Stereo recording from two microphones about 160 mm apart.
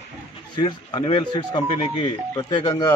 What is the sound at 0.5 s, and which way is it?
Speech, 30° left (ahead or behind).